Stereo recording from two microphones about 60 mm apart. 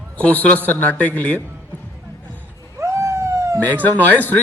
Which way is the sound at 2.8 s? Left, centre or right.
Right.